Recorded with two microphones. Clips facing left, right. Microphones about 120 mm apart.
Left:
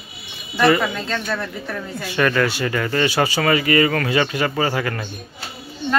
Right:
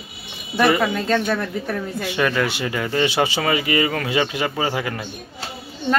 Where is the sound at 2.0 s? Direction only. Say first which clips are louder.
Left 3 dB; 15° right (ahead or behind).